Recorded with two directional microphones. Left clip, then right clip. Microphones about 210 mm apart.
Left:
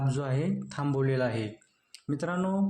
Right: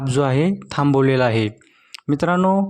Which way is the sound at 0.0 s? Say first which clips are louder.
Right 14 dB; 45° right (ahead or behind).